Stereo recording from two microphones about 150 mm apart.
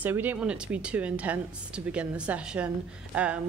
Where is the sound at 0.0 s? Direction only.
10° right (ahead or behind).